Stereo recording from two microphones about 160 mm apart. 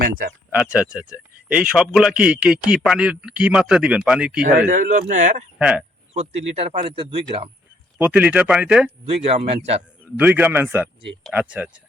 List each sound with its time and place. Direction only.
0.0 s speech: 65° right (ahead or behind)
0.5 s a man's voice: 5° right (ahead or behind)
4.6 s speech: 55° right (ahead or behind)
5.5 s speech: 5° right (ahead or behind)
6.1 s speech: 40° right (ahead or behind)
7.9 s speech: 10° right (ahead or behind)
9.0 s speech: 40° right (ahead or behind)
10.2 s speech: 10° right (ahead or behind)